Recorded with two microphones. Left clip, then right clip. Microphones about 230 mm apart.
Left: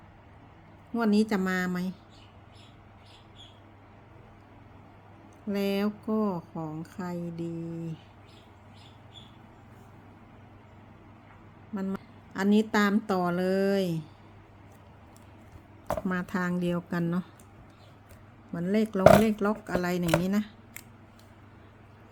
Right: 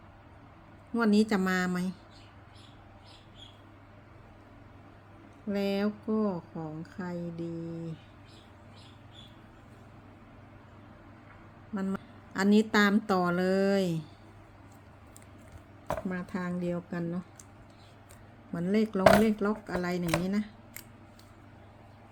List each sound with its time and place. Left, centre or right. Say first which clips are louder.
0.9 s a woman's voice: even; centre
5.5 s speech: left 1 dB; centre
11.7 s a woman's voice: even; centre
16.0 s speech: left 5 dB; left
18.5 s a woman's voice: left 1 dB; centre